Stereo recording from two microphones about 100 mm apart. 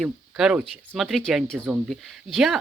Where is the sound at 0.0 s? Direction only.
5° right (ahead or behind).